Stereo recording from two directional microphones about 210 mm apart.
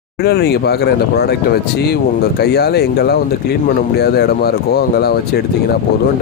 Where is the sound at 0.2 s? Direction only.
50° left (ahead or behind).